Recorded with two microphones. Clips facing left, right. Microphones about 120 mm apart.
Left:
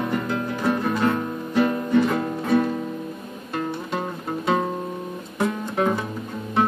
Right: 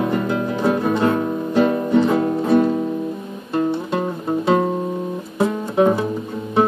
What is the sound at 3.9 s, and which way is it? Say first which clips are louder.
Music: right 6 dB; 5° right (ahead or behind).